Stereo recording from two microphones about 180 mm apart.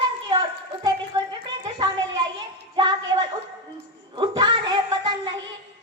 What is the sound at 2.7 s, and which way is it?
Music, 25° right (ahead or behind).